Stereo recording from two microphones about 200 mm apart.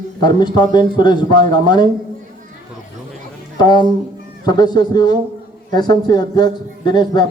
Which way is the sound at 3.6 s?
20° left (ahead or behind).